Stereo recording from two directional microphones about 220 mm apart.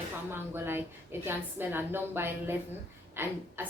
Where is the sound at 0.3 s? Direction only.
10° right (ahead or behind).